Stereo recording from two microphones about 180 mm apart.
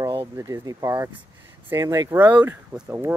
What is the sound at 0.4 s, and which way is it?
Speech, 20° right (ahead or behind).